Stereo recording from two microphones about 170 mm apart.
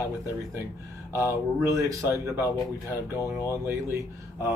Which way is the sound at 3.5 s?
15° right (ahead or behind).